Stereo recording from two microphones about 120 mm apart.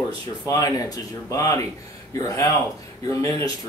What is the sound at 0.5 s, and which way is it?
A man's voice, 30° left (ahead or behind).